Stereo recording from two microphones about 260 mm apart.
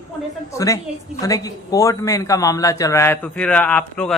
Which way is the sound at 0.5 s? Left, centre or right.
Centre.